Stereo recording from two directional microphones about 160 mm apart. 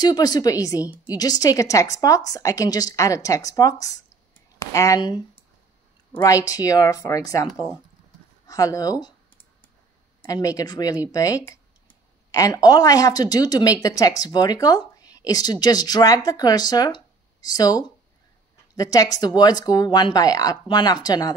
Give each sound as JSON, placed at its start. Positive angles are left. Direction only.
{"t": 0.0, "sound": "speech", "side_deg": 25}
{"t": 7.5, "sound": "speech", "side_deg": -10}
{"t": 8.5, "sound": "speech", "side_deg": 20}
{"t": 10.2, "sound": "speech", "side_deg": 20}